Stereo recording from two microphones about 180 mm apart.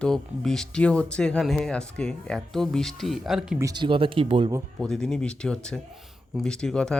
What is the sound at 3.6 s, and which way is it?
Speech, 20° right (ahead or behind).